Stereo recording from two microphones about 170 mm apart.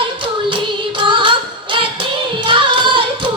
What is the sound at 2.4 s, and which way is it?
Music, 30° right (ahead or behind).